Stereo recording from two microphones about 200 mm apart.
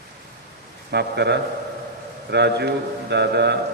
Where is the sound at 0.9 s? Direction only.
55° right (ahead or behind).